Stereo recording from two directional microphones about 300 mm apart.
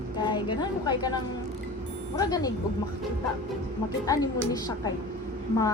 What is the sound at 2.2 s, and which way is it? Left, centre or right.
Speech, centre.